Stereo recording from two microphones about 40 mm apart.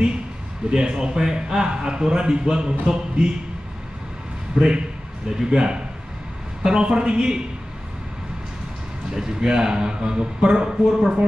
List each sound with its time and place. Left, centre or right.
0.7 s a man's voice: right
4.6 s a man's voice: right
9.1 s a man's voice: centre